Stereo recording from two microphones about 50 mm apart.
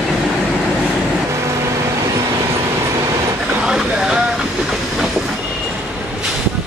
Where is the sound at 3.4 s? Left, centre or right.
Centre.